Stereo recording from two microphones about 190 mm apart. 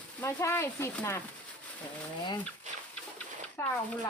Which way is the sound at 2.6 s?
40° right (ahead or behind).